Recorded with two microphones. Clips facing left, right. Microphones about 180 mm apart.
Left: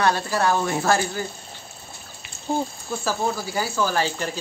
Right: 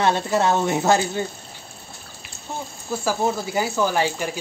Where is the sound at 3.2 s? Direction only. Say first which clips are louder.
Right 3 dB; 20° right (ahead or behind).